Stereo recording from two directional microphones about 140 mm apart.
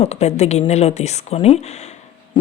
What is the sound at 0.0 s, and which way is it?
A woman's voice, 50° left (ahead or behind).